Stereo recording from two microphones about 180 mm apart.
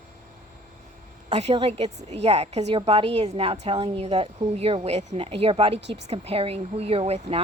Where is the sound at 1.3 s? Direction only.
35° right (ahead or behind).